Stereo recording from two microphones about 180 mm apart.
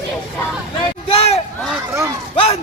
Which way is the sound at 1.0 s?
30° left (ahead or behind).